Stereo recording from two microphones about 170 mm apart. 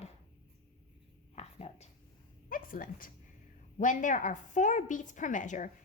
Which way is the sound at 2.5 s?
55° left (ahead or behind).